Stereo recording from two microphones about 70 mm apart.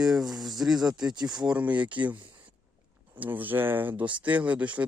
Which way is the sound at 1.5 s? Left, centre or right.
Right.